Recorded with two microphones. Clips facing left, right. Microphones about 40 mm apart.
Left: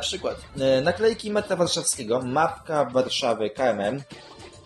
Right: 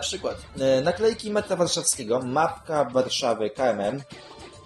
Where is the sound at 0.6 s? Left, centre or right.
Centre.